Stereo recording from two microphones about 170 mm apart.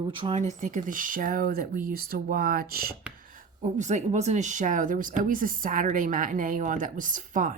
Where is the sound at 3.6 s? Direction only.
45° right (ahead or behind).